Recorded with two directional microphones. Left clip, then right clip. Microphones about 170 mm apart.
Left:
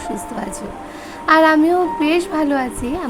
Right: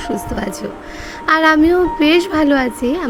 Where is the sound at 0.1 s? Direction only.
15° right (ahead or behind).